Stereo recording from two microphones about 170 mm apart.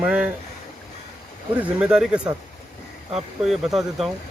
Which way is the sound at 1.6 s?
5° right (ahead or behind).